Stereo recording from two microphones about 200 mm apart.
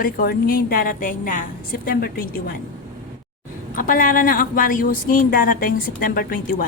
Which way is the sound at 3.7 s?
45° left (ahead or behind).